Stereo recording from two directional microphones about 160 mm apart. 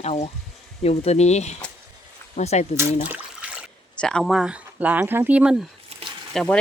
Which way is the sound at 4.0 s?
5° left (ahead or behind).